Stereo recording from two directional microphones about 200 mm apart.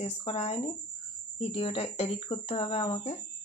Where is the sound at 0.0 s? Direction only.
30° left (ahead or behind).